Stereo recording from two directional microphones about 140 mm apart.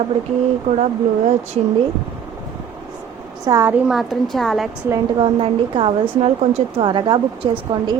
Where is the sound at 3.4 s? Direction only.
20° right (ahead or behind).